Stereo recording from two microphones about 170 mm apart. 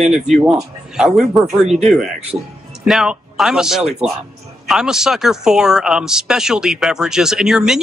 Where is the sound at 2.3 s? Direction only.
25° right (ahead or behind).